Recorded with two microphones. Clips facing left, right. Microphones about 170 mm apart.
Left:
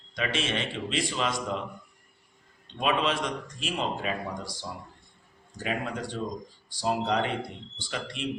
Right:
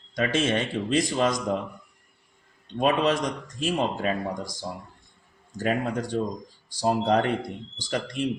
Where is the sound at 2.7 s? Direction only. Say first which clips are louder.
Right 4 dB; 45° right (ahead or behind).